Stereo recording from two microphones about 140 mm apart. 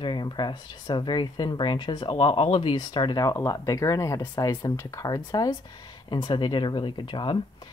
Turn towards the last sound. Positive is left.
turn(degrees=35)  # may be behind; listen again after turning